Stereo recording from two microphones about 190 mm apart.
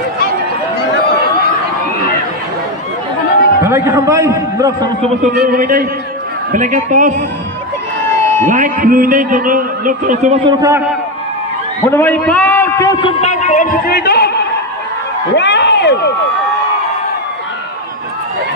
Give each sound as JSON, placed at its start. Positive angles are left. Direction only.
{"t": 3.6, "sound": "a man's voice", "side_deg": -15}
{"t": 5.4, "sound": "a man's voice", "side_deg": -50}
{"t": 8.5, "sound": "a man's voice", "side_deg": -45}
{"t": 10.4, "sound": "a man's voice", "side_deg": -20}
{"t": 11.8, "sound": "a man's voice", "side_deg": 10}
{"t": 13.2, "sound": "a man's voice", "side_deg": 40}
{"t": 15.3, "sound": "a sound", "side_deg": 65}